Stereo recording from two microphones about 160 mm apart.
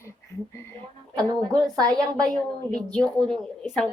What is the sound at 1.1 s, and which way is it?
A woman's voice, 25° right (ahead or behind).